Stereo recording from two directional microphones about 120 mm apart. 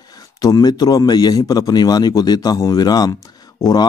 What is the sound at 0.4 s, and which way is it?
A man's voice, 30° left (ahead or behind).